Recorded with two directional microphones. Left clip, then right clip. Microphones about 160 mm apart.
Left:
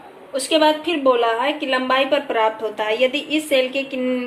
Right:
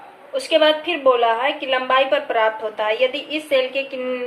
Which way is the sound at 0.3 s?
25° left (ahead or behind).